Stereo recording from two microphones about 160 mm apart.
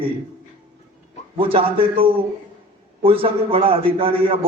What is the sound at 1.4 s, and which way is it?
A man's voice, 35° right (ahead or behind).